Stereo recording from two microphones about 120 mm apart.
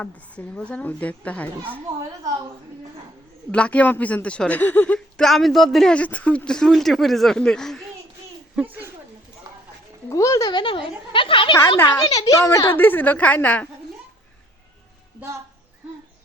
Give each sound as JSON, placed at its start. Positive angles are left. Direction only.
{"t": 0.0, "sound": "a man's voice", "side_deg": 10}
{"t": 3.5, "sound": "a man's voice", "side_deg": 10}
{"t": 8.6, "sound": "speech", "side_deg": -15}
{"t": 9.5, "sound": "a sound", "side_deg": -35}
{"t": 10.1, "sound": "speech", "side_deg": 25}
{"t": 10.5, "sound": "a sound", "side_deg": 45}
{"t": 11.9, "sound": "a man's voice", "side_deg": 30}